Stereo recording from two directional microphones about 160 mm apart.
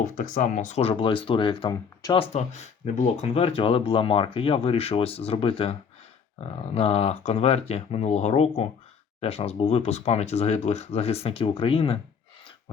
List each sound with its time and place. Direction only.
0.2 s speech: 55° left (ahead or behind); by 2.1 s 30° left (ahead or behind)
2.1 s speech: 40° left (ahead or behind)